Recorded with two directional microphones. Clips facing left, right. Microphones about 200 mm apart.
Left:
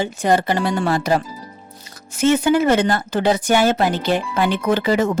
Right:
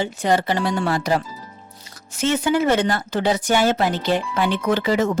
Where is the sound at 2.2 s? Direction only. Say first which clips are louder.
Left 4 dB; 50° left (ahead or behind).